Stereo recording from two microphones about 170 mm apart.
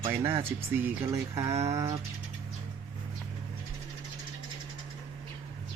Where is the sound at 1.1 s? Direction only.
15° right (ahead or behind).